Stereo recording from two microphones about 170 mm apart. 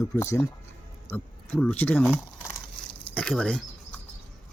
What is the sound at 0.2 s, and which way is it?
Speech, 15° left (ahead or behind).